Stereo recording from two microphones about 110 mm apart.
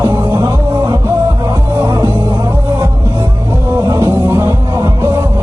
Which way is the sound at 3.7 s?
30° right (ahead or behind).